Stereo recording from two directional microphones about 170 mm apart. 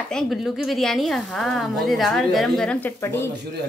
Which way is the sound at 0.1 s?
Centre (ahead or behind).